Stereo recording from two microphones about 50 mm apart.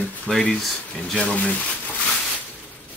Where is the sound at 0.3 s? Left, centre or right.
Centre.